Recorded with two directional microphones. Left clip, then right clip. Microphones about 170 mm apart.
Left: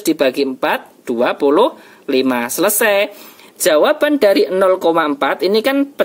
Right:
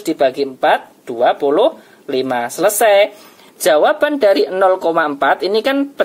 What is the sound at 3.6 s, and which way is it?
Speech, 40° left (ahead or behind).